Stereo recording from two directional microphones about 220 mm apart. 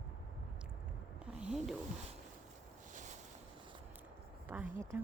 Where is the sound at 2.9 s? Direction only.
35° right (ahead or behind).